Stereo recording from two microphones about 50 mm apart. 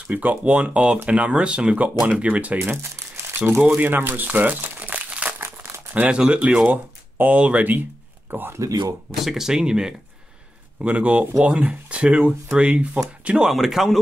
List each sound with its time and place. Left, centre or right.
0.0 s speech: right
2.6 s speech: right
3.6 s speech: right
4.6 s crumpling: right
5.4 s crumpling: right
6.0 s speech: right
6.7 s speech: right
8.3 s speech: right
9.2 s speech: centre
10.8 s speech: right
13.5 s speech: centre